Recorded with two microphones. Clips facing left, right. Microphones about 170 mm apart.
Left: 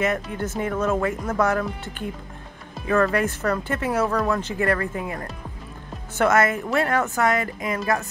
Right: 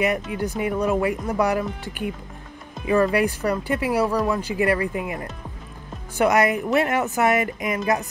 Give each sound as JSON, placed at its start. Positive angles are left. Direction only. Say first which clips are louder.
{"t": 0.0, "sound": "speech", "louder": "right 1 dB", "side_deg": -15}